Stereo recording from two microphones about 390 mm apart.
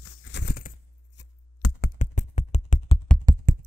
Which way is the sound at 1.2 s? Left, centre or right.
Left.